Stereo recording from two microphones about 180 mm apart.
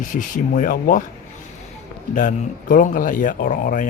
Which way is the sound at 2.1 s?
45° left (ahead or behind).